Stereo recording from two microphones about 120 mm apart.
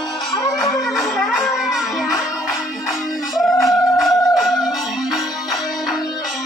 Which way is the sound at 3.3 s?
Centre (ahead or behind).